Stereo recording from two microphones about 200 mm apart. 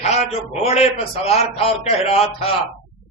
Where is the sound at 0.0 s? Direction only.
30° left (ahead or behind).